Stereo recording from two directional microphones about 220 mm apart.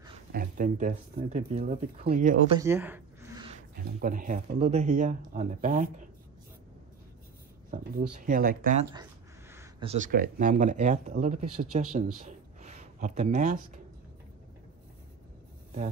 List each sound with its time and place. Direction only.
0.3 s speech: 40° right (ahead or behind)
2.5 s a sound: 10° right (ahead or behind)
3.7 s speech: 40° right (ahead or behind)
7.7 s speech: 35° right (ahead or behind)
11.4 s speech: 90° right
12.3 s a sound: 30° right (ahead or behind)